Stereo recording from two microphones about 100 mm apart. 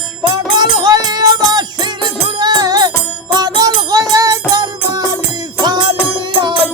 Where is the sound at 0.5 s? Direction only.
45° right (ahead or behind).